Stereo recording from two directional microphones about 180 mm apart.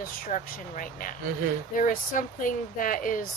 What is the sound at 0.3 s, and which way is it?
Speech, 45° left (ahead or behind).